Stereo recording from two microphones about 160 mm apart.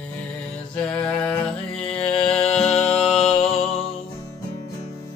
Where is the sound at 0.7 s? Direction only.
5° left (ahead or behind).